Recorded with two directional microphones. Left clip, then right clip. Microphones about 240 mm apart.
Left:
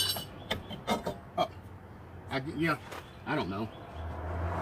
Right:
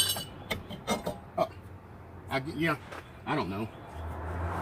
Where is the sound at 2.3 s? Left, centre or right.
Centre.